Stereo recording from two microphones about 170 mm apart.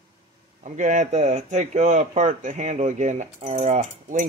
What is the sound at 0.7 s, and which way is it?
Speech, 45° right (ahead or behind).